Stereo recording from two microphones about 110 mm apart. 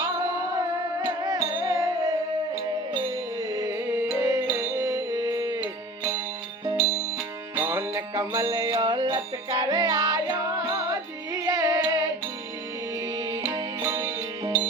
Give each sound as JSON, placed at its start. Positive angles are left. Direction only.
{"t": 1.0, "sound": "music", "side_deg": -30}
{"t": 3.5, "sound": "music", "side_deg": -35}
{"t": 7.6, "sound": "music", "side_deg": -25}
{"t": 8.4, "sound": "music", "side_deg": -40}
{"t": 13.1, "sound": "music", "side_deg": -35}